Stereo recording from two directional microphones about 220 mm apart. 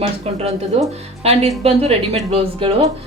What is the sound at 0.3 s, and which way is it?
A woman's voice, 25° right (ahead or behind).